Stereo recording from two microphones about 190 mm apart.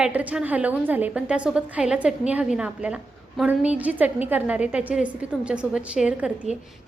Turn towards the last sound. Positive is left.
turn(degrees=-5)  # may be behind; listen again after turning